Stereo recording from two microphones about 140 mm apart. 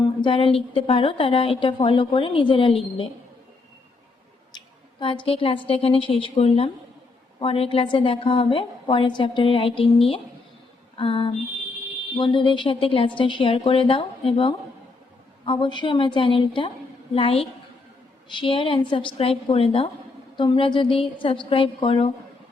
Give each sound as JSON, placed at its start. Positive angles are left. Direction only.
{"t": 0.2, "sound": "a woman's voice", "side_deg": 40}
{"t": 4.5, "sound": "a woman's voice", "side_deg": 35}